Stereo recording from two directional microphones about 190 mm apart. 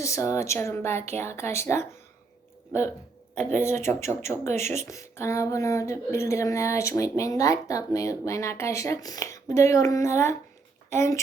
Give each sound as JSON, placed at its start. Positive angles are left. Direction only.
{"t": 0.0, "sound": "speech", "side_deg": 15}
{"t": 3.6, "sound": "speech", "side_deg": 15}
{"t": 4.5, "sound": "speech", "side_deg": -35}
{"t": 4.8, "sound": "speech", "side_deg": 15}